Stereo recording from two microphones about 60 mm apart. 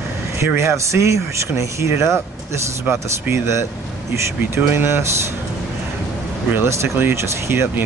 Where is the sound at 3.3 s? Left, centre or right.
Right.